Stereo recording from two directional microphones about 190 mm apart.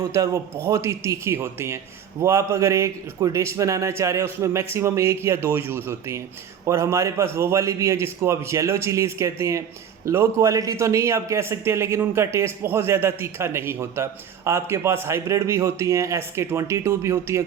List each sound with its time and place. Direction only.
0.0 s speech: 15° right (ahead or behind)